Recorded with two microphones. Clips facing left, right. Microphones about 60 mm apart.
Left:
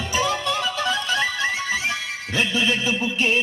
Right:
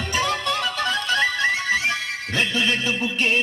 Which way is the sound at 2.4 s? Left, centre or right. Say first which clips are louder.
Left 1 dB; right.